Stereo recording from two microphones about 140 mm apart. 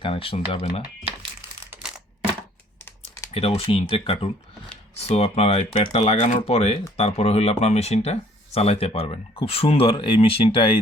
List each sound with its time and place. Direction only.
0.0 s speech: 40° left (ahead or behind)
1.7 s a sound: 5° right (ahead or behind)
3.3 s speech: 45° left (ahead or behind)